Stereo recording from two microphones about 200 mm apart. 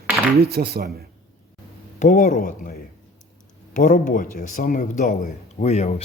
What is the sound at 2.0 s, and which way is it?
Speech, 40° left (ahead or behind).